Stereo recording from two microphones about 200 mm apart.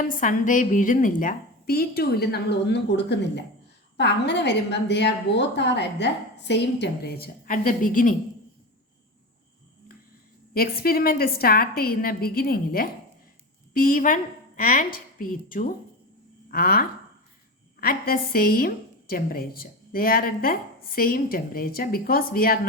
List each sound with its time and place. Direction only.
0.1 s a woman's voice: 40° left (ahead or behind)
10.5 s a woman's voice: 50° left (ahead or behind)